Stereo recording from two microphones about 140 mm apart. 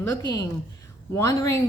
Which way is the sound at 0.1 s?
25° left (ahead or behind).